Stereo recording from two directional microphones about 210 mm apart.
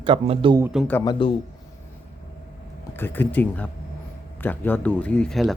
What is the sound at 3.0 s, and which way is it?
Speech, 10° left (ahead or behind).